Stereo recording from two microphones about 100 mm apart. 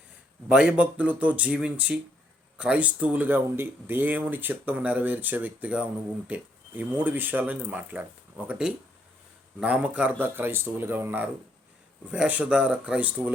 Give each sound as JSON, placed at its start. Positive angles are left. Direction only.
{"t": 0.4, "sound": "speech", "side_deg": -10}